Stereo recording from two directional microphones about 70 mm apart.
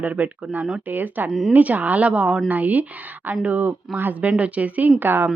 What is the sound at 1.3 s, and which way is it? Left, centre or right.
Speech, centre.